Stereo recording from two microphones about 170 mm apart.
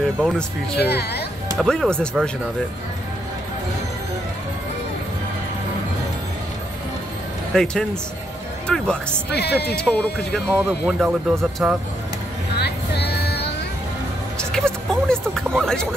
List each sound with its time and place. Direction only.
0.2 s speech: centre (ahead or behind)
0.7 s speech: 70° left (ahead or behind)
1.6 s speech: 5° left (ahead or behind)
7.5 s speech: 5° left (ahead or behind)
9.3 s speech: 75° left (ahead or behind)
9.8 s speech: 5° left (ahead or behind)
10.5 s speech: 10° right (ahead or behind)
12.5 s music: 75° left (ahead or behind)
14.5 s a sound: 5° left (ahead or behind)